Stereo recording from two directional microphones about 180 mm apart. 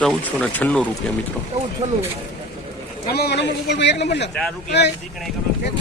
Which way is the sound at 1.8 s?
40° right (ahead or behind).